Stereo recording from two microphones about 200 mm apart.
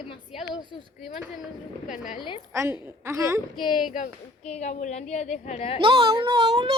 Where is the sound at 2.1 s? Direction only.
25° left (ahead or behind).